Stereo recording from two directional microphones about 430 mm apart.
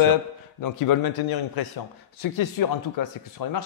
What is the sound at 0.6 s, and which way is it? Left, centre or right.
A man's voice, left.